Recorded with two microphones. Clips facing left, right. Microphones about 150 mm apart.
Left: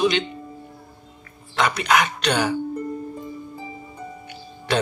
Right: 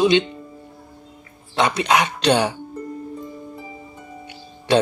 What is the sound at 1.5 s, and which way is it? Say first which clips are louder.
Speech: right 2 dB; 25° right (ahead or behind).